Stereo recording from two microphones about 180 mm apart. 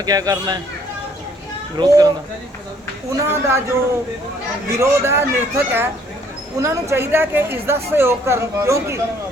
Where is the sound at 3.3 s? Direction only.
15° right (ahead or behind).